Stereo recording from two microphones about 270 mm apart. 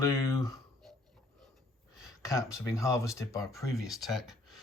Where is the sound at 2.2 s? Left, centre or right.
Centre.